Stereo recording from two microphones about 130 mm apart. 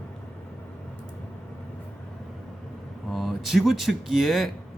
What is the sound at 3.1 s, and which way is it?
Speech, centre (ahead or behind).